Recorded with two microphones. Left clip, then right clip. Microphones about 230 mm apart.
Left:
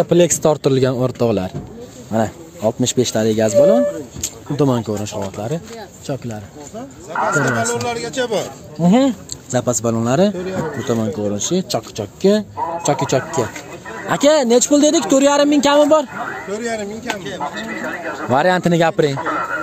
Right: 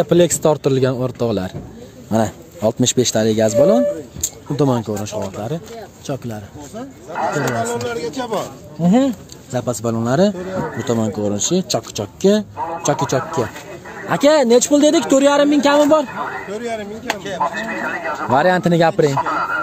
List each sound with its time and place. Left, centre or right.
0.0 s speech: centre
2.0 s speech: centre
7.2 s speech: right
7.5 s speech: left
8.8 s speech: centre
16.4 s speech: left
17.1 s speech: right
18.3 s speech: centre
19.1 s speech: right